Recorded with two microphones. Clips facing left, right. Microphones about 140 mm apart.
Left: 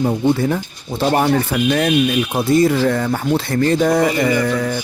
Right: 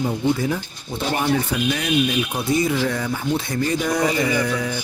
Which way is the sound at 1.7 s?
50° left (ahead or behind).